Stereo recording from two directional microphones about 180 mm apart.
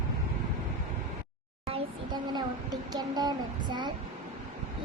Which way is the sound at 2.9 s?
20° right (ahead or behind).